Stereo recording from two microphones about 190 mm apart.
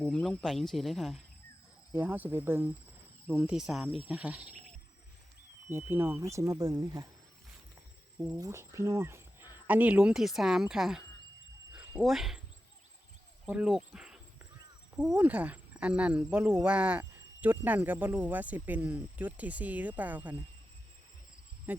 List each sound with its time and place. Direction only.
0.0 s speech: 5° left (ahead or behind)
5.6 s speech: 15° right (ahead or behind)
8.4 s speech: 15° right (ahead or behind)
12.0 s speech: centre (ahead or behind)
13.4 s speech: 5° right (ahead or behind)
21.7 s speech: 10° right (ahead or behind)